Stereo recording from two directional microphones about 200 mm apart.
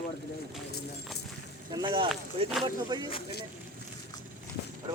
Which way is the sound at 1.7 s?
25° right (ahead or behind).